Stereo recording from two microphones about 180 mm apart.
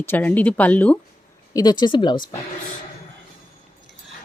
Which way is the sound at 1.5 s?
20° left (ahead or behind).